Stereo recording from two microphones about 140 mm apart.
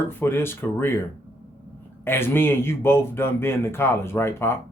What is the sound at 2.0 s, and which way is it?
A man's voice, 15° left (ahead or behind).